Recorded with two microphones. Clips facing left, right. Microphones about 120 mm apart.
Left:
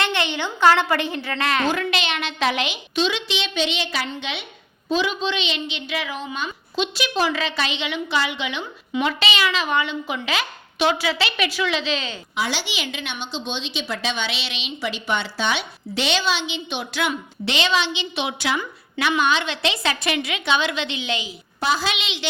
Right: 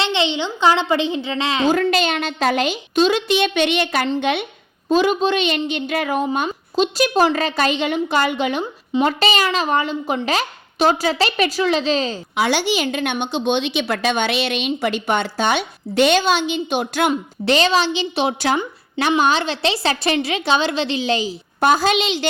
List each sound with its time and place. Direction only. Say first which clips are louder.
0.0 s a woman's voice: right 4 dB; 20° right (ahead or behind)
1.7 s a woman's voice: right 7 dB; 45° right (ahead or behind)
12.4 s a woman's voice: right 8 dB; 55° right (ahead or behind); by 21.3 s 35° right (ahead or behind)
21.6 s a woman's voice: right 7 dB; 50° right (ahead or behind)